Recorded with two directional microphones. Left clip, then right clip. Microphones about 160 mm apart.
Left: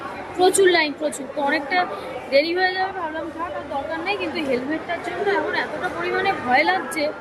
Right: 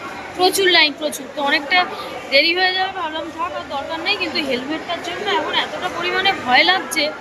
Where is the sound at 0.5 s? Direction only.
25° left (ahead or behind).